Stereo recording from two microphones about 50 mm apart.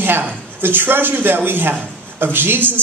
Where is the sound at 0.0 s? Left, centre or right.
Right.